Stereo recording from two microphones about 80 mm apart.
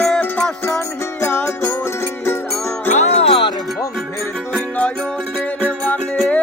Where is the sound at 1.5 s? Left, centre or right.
Left.